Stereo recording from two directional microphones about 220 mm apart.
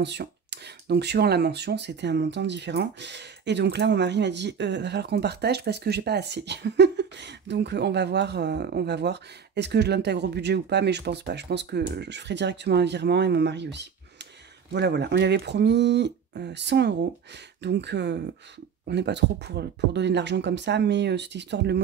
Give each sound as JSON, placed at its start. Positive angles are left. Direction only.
{"t": 0.0, "sound": "speech", "side_deg": -50}